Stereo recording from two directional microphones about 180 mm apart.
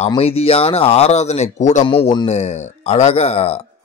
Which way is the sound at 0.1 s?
35° left (ahead or behind).